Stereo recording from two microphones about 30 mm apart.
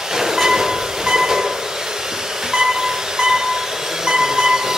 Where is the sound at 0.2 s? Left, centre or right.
Centre.